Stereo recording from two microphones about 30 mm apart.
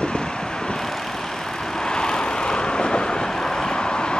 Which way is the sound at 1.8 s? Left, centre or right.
Left.